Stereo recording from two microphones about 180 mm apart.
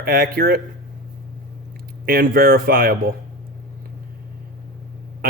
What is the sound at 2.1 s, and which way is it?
Speech, 55° right (ahead or behind).